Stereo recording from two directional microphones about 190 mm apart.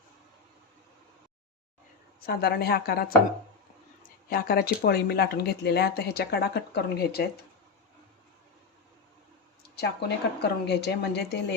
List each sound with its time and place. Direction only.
2.2 s speech: 55° left (ahead or behind)
4.0 s a sound: 50° left (ahead or behind)
4.8 s speech: 55° left (ahead or behind)
9.7 s speech: 60° left (ahead or behind)